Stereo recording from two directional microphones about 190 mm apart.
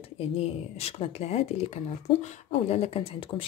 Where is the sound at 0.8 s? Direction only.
30° left (ahead or behind).